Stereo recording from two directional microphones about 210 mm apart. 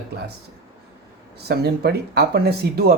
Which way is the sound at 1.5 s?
50° right (ahead or behind).